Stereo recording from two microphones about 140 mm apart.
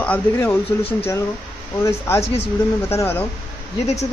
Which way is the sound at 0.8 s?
40° left (ahead or behind).